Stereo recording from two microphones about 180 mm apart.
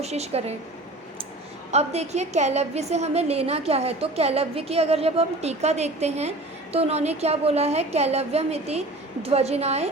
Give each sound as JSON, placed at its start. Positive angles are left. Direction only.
{"t": 0.0, "sound": "a woman's voice", "side_deg": -35}
{"t": 1.7, "sound": "a woman's voice", "side_deg": -35}